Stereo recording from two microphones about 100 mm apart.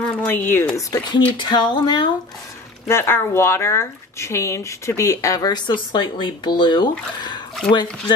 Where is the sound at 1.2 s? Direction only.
50° left (ahead or behind).